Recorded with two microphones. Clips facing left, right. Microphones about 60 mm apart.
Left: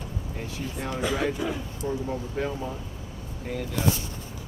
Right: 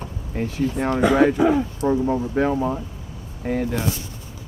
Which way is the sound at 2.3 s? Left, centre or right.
Right.